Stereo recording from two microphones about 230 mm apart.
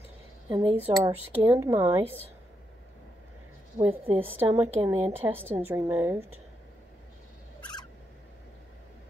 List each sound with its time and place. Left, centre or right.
0.5 s a woman's voice: right
4.2 s a woman's voice: centre